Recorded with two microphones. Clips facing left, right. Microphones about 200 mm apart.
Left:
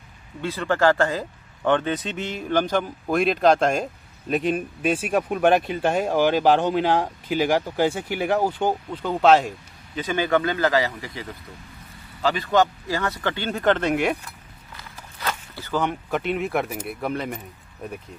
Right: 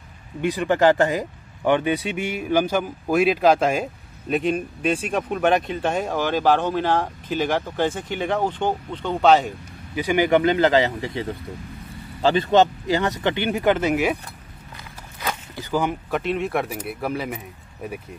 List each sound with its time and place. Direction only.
0.4 s speech: 15° right (ahead or behind); by 9.5 s centre (ahead or behind)
9.9 s speech: 15° right (ahead or behind)
15.2 s speech: 15° right (ahead or behind)